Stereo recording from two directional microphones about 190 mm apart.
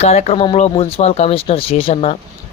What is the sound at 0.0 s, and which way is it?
Speech, 35° left (ahead or behind).